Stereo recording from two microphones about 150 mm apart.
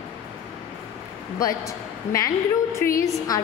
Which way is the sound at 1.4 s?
20° left (ahead or behind).